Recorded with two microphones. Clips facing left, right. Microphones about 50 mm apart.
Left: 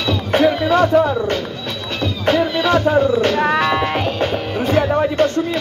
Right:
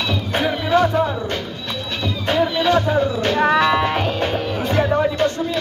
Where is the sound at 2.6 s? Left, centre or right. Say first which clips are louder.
Left 4 dB; left.